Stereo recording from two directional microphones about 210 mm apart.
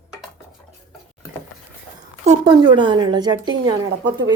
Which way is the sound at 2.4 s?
20° right (ahead or behind).